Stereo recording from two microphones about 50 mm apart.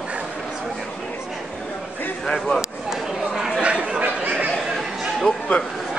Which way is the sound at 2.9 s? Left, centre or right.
Centre.